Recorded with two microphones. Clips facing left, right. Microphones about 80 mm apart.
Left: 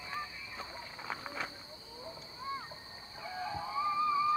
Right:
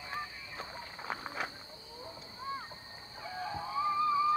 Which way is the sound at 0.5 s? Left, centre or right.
Centre.